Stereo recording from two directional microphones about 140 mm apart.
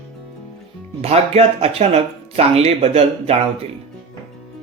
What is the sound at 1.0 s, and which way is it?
Speech, 45° right (ahead or behind).